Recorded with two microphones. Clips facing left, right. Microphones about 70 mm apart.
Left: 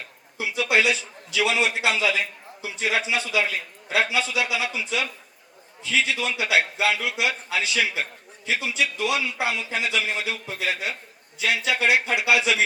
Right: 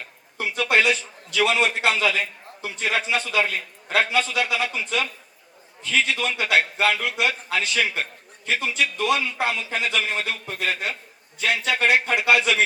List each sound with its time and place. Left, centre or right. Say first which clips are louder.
0.3 s a man's voice: right 1 dB; right